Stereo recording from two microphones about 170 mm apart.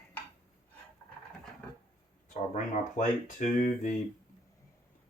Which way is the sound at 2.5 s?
45° left (ahead or behind).